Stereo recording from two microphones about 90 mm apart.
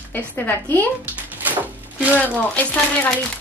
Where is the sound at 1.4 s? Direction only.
20° right (ahead or behind).